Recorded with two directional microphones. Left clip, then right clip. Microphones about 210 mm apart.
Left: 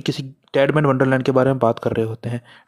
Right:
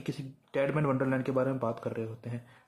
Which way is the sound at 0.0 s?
40° left (ahead or behind).